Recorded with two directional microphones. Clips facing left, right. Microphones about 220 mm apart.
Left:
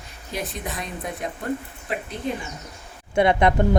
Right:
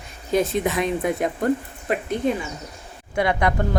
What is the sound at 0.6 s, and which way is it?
Speech, 90° right.